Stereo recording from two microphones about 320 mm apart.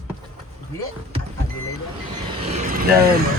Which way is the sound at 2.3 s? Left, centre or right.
Centre.